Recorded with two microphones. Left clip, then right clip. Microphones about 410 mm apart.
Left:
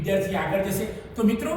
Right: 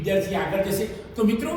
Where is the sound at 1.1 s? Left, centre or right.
Centre.